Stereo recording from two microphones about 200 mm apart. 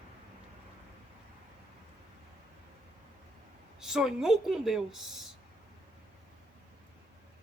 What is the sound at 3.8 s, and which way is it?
Speech, centre (ahead or behind).